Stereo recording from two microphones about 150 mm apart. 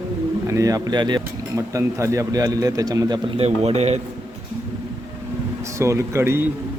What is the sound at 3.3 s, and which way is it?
Speech, 45° right (ahead or behind).